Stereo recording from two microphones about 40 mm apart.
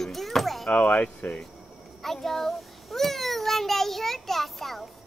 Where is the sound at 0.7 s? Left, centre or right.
Left.